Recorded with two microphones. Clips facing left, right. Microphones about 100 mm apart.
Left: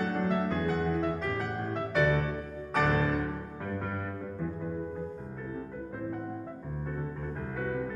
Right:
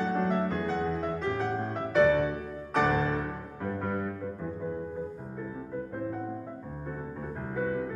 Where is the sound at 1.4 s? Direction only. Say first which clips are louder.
Right 2 dB; 20° right (ahead or behind).